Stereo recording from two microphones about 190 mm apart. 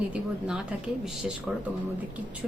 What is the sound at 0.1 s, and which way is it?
Speech, 5° right (ahead or behind).